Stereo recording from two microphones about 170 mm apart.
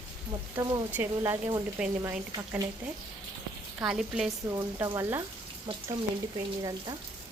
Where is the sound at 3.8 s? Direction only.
5° right (ahead or behind).